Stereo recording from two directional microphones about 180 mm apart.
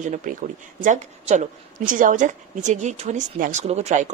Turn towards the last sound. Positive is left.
turn(degrees=-40)  # may be behind; listen again after turning